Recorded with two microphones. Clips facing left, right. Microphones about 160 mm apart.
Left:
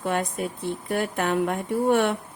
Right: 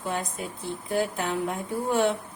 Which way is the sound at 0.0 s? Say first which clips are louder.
Left 5 dB; 60° left (ahead or behind).